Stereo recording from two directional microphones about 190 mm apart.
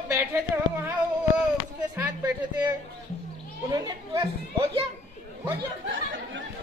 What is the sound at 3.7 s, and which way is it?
Speech, 20° right (ahead or behind).